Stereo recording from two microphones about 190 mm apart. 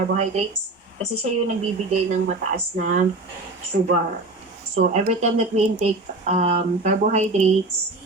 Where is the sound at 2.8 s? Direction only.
40° right (ahead or behind).